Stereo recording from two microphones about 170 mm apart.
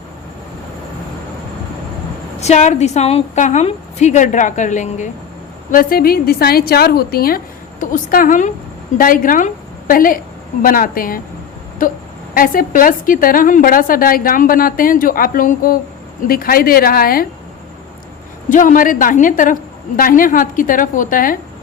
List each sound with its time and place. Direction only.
2.4 s a woman's voice: 40° left (ahead or behind)
5.7 s a woman's voice: 60° left (ahead or behind)
18.4 s a woman's voice: 50° left (ahead or behind)